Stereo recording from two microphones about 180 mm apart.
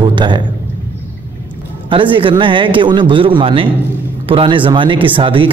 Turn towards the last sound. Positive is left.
turn(degrees=-30)  # may be behind; listen again after turning